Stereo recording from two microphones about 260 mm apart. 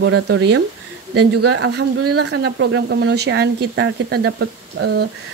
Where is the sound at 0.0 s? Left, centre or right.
Right.